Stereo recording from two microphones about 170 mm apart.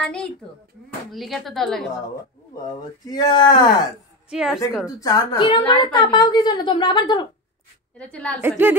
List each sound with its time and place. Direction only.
0.0 s speech: 5° left (ahead or behind)
2.7 s speech: 25° left (ahead or behind)
4.3 s speech: 5° right (ahead or behind)
4.8 s speech: 20° left (ahead or behind)
8.0 s a woman's voice: 5° left (ahead or behind)
8.4 s a woman's voice: 10° right (ahead or behind)